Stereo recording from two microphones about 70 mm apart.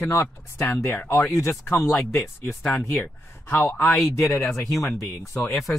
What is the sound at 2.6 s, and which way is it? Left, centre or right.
Speech, centre.